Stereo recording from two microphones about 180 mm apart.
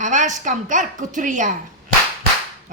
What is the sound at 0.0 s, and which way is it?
Speech, 45° right (ahead or behind).